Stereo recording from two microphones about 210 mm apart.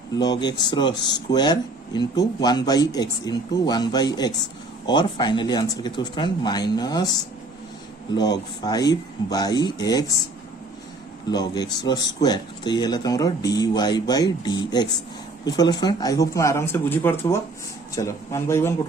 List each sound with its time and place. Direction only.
0.1 s speech: 20° left (ahead or behind)
8.1 s speech: 20° left (ahead or behind)
11.3 s speech: 20° left (ahead or behind)